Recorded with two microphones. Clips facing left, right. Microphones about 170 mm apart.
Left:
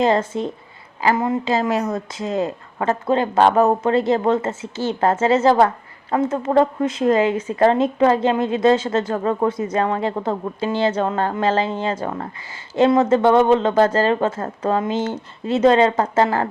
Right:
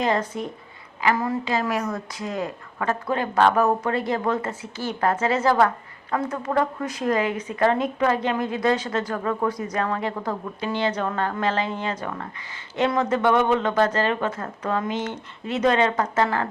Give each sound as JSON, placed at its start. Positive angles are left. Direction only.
{"t": 0.0, "sound": "speech", "side_deg": 25}